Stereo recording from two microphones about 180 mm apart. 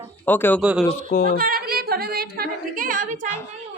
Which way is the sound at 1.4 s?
55° right (ahead or behind).